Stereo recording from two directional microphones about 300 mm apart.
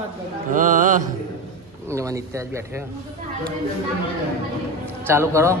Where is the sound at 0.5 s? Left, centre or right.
Right.